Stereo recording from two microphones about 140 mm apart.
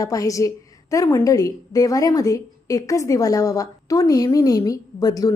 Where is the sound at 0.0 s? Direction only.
25° left (ahead or behind).